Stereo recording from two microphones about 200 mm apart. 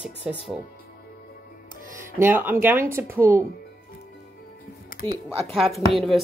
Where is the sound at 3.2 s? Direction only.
45° right (ahead or behind).